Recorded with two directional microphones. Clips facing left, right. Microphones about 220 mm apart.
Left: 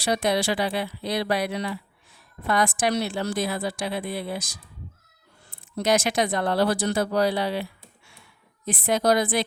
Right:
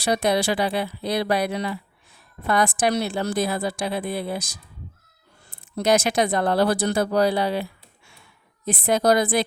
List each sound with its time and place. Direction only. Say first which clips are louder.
0.1 s speech: right 2 dB; 40° right (ahead or behind)
5.7 s speech: right 2 dB; 40° right (ahead or behind)
8.7 s a woman's voice: right 2 dB; 40° right (ahead or behind)